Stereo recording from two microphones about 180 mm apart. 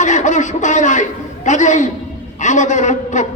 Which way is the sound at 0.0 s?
45° left (ahead or behind).